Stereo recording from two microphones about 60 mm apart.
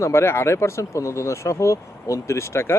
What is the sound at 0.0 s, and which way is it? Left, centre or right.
Speech, left.